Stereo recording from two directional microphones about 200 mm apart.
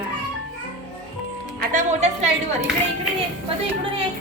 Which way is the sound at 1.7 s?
40° right (ahead or behind).